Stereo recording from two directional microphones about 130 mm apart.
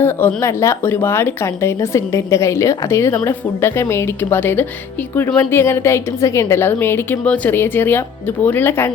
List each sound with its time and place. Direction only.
0.0 s a woman's voice: 15° left (ahead or behind)